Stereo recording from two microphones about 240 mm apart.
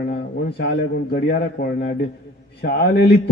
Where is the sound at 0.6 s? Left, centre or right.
Left.